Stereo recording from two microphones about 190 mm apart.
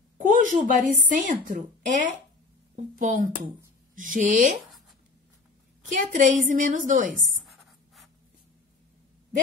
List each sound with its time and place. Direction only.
0.2 s a woman's voice: 45° right (ahead or behind)
5.9 s a woman's voice: 40° right (ahead or behind)
7.4 s writing: centre (ahead or behind)